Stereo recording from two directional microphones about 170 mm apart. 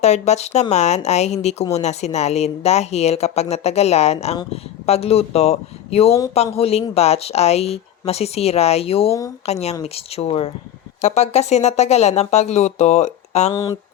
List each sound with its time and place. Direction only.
0.0 s speech: 40° left (ahead or behind)
13.5 s speech: 20° left (ahead or behind)